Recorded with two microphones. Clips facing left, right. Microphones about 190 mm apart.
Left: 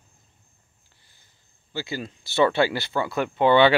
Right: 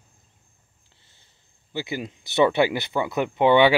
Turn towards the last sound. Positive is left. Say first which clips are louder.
# even
turn(degrees=-15)  # may be behind; listen again after turning